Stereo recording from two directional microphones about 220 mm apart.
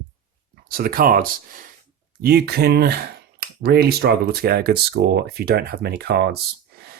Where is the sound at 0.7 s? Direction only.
40° right (ahead or behind).